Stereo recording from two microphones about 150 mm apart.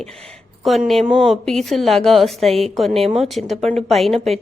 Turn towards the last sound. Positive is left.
turn(degrees=0)  # may be behind; listen again after turning